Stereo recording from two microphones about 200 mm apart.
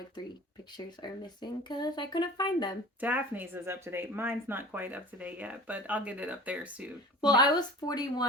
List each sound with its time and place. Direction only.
1.0 s speech: 20° left (ahead or behind)
3.0 s speech: 10° right (ahead or behind)
7.2 s speech: 20° left (ahead or behind)